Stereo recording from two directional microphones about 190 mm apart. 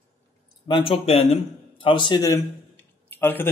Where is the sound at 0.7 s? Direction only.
30° left (ahead or behind).